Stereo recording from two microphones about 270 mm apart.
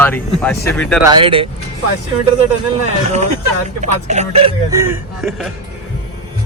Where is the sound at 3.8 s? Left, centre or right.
Right.